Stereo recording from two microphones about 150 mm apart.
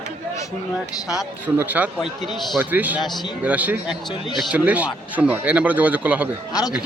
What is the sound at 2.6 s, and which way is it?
Speech, 10° right (ahead or behind).